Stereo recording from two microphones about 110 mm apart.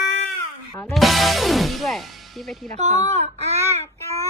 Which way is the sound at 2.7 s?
90° right.